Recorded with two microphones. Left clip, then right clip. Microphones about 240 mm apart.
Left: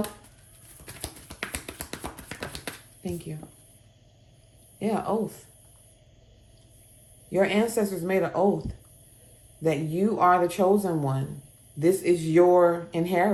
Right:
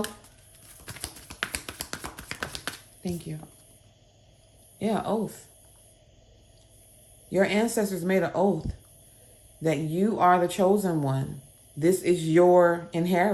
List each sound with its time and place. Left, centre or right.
1.6 s finger snapping: right
3.0 s speech: right
4.8 s speech: right
7.3 s speech: right
9.6 s speech: right